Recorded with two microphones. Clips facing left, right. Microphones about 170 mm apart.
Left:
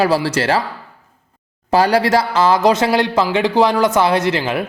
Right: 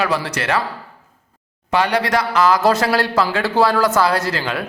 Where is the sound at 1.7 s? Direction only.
35° left (ahead or behind).